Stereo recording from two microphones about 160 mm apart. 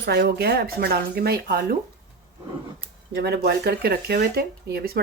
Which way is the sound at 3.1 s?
85° right.